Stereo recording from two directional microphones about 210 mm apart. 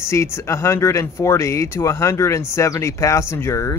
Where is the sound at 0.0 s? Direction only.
15° left (ahead or behind).